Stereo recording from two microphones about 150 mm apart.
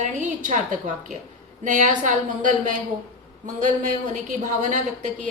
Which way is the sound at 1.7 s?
55° right (ahead or behind).